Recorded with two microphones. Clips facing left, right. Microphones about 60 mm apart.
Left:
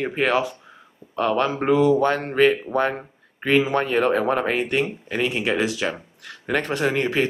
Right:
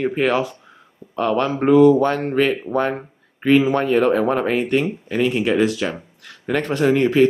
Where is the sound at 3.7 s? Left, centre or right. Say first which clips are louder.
Right 3 dB; left.